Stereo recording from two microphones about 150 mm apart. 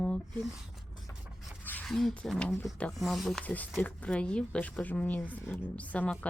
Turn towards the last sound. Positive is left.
turn(degrees=10)  # may be behind; listen again after turning